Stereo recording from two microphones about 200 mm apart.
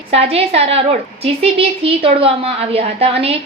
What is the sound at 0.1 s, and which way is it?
A woman's voice, 30° right (ahead or behind).